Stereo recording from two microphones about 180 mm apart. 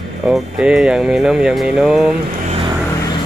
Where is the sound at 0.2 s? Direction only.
5° right (ahead or behind).